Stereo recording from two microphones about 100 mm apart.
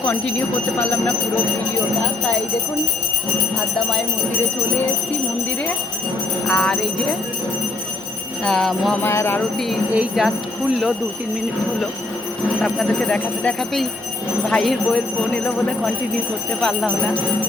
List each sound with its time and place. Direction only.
0.8 s speech: 15° left (ahead or behind)
6.5 s speech: 10° left (ahead or behind)
8.4 s speech: 5° left (ahead or behind)
9.0 s jingle bell: 25° left (ahead or behind)
9.9 s speech: 10° right (ahead or behind)
12.6 s speech: 10° left (ahead or behind)
16.6 s speech: 5° left (ahead or behind)